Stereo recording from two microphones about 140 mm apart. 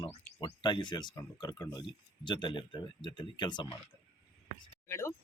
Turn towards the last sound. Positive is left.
turn(degrees=20)  # may be behind; listen again after turning